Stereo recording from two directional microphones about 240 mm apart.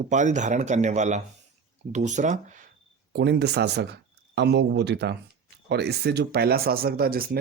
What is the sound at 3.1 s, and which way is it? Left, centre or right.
Speech, right.